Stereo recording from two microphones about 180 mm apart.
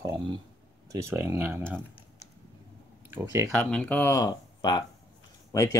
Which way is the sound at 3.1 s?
15° right (ahead or behind).